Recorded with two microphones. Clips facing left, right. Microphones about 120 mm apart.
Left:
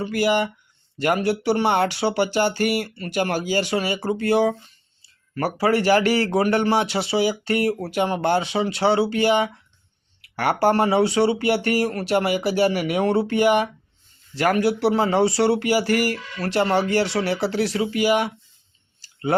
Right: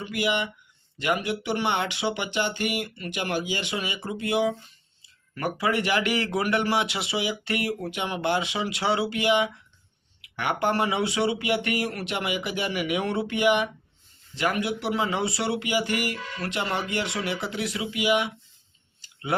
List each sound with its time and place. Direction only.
0.0 s a man's voice: 40° left (ahead or behind)